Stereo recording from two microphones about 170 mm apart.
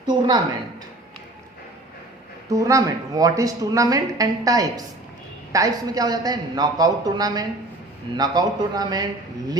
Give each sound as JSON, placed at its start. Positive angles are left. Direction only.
{"t": 0.0, "sound": "speech", "side_deg": -25}
{"t": 2.5, "sound": "speech", "side_deg": -20}